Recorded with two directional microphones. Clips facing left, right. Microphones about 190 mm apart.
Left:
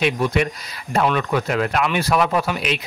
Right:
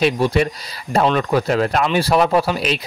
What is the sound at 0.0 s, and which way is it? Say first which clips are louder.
A man's voice: right 3 dB; 35° right (ahead or behind).